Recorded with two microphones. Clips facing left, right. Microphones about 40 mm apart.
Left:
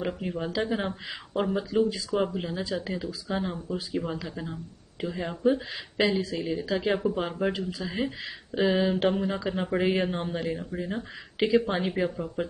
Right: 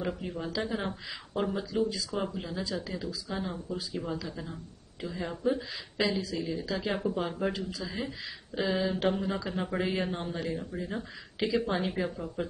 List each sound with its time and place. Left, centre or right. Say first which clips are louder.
0.0 s speech: left 3 dB; left
6.6 s speech: left 7 dB; left